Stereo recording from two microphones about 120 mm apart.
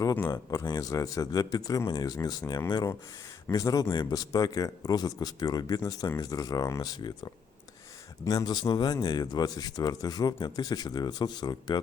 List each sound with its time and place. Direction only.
0.0 s speech: 30° left (ahead or behind)
8.2 s speech: 30° left (ahead or behind)